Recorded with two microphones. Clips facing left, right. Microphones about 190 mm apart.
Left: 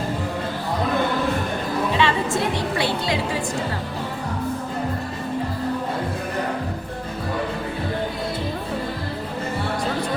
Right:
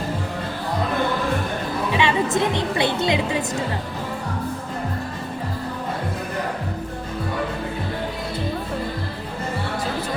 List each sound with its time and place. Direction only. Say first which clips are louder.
1.9 s a woman's voice: right 3 dB; 15° right (ahead or behind)